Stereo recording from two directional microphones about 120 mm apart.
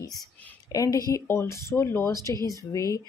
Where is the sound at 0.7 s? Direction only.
30° left (ahead or behind).